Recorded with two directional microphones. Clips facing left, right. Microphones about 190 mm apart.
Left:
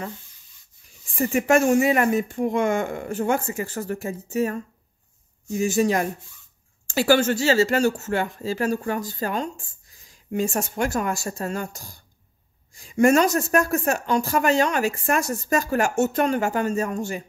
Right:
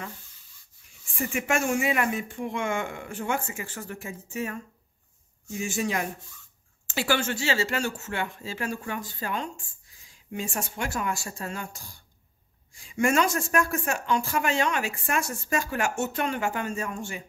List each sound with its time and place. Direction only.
1.1 s speech: 40° left (ahead or behind)